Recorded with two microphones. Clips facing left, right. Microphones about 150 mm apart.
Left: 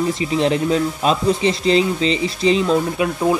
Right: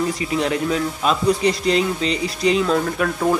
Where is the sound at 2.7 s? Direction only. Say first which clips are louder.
Left 2 dB; 15° left (ahead or behind).